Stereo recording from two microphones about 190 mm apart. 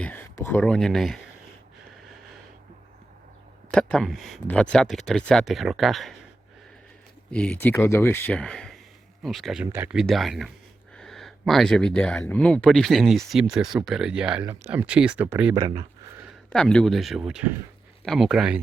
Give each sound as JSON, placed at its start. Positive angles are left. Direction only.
{"t": 0.0, "sound": "speech", "side_deg": 10}
{"t": 3.7, "sound": "speech", "side_deg": 5}
{"t": 7.3, "sound": "speech", "side_deg": 5}
{"t": 15.5, "sound": "speech", "side_deg": -25}
{"t": 16.5, "sound": "speech", "side_deg": 5}